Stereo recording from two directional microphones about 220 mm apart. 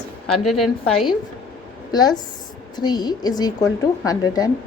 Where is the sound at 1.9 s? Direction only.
20° left (ahead or behind).